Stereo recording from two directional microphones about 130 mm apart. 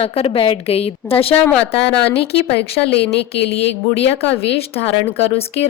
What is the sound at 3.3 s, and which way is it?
Speech, 50° left (ahead or behind).